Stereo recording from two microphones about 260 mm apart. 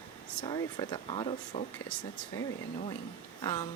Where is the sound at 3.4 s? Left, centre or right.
Centre.